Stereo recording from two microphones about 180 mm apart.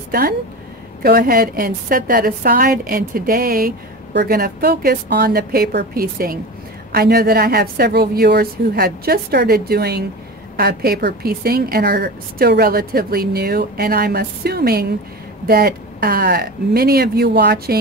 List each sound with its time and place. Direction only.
1.0 s a woman's voice: 55° right (ahead or behind)